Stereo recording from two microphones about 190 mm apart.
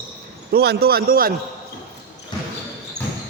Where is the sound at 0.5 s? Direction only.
55° right (ahead or behind).